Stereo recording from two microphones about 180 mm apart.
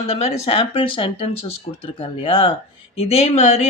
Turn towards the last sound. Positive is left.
turn(degrees=40)  # may be behind; listen again after turning